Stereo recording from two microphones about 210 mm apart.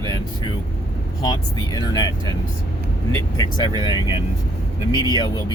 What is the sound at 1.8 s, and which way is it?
Speech, 15° left (ahead or behind).